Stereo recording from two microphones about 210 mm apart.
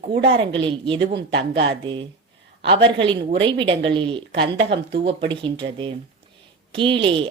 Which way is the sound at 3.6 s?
25° right (ahead or behind).